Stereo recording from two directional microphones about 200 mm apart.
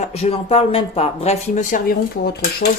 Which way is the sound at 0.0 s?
30° left (ahead or behind).